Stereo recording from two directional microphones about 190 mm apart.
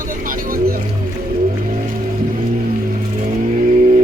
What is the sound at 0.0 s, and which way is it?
Vehicle, 45° right (ahead or behind).